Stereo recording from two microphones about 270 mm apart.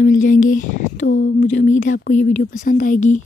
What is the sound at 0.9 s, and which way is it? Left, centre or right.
Speech, left.